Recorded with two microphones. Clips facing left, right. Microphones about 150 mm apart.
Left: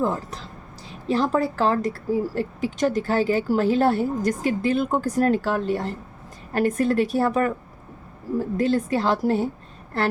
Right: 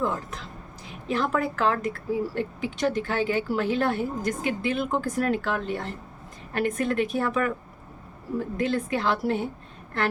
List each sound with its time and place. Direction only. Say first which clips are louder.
0.0 s a woman's voice: left 3 dB; 35° left (ahead or behind)
8.5 s a woman's voice: left 5 dB; 35° left (ahead or behind)